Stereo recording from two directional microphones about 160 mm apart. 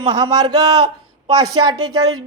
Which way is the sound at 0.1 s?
25° right (ahead or behind).